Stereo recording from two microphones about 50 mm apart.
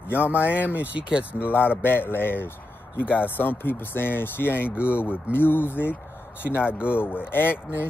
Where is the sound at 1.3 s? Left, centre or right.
Left.